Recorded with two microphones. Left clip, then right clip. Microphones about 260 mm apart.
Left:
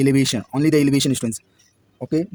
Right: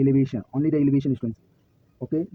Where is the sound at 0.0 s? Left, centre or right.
Left.